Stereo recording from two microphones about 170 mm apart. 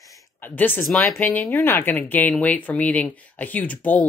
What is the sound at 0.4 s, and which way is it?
Speech, 10° left (ahead or behind).